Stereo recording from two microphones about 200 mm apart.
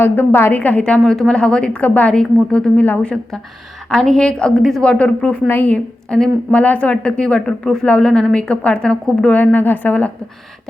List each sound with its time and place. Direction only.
0.0 s a woman's voice: 10° left (ahead or behind)